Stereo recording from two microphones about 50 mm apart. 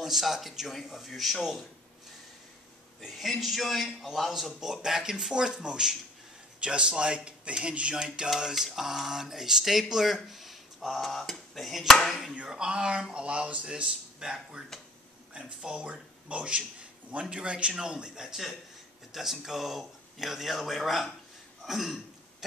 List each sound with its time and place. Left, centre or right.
0.0 s speech: centre
3.0 s speech: centre
12.4 s speech: centre